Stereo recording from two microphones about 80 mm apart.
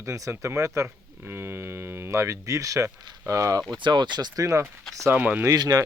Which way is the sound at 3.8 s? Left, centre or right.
Right.